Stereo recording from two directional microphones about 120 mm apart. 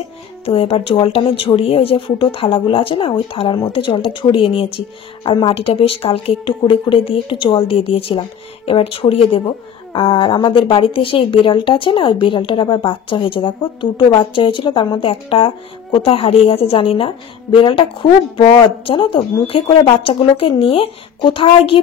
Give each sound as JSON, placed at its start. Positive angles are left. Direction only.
{"t": 0.5, "sound": "speech", "side_deg": 55}